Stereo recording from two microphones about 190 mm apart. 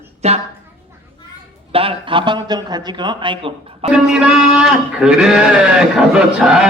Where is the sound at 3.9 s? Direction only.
5° right (ahead or behind).